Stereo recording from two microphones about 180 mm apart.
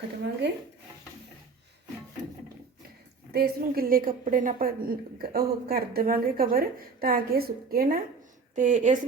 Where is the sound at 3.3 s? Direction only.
60° right (ahead or behind).